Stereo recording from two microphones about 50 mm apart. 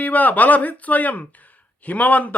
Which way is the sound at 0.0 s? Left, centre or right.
Left.